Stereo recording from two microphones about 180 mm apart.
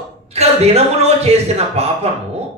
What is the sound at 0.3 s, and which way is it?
A man's voice, 35° right (ahead or behind).